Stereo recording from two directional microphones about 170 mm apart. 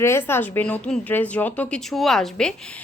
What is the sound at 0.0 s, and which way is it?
A woman's voice, 15° left (ahead or behind).